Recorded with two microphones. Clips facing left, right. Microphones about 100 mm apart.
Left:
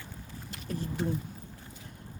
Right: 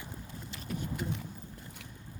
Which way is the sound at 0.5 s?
35° left (ahead or behind).